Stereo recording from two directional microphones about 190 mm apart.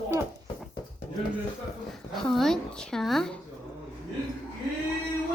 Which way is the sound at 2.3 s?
Centre (ahead or behind).